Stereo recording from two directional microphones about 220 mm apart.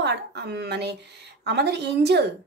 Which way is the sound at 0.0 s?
50° right (ahead or behind).